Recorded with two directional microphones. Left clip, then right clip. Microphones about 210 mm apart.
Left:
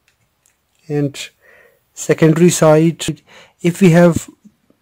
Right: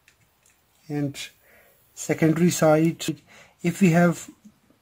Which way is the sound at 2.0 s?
40° left (ahead or behind).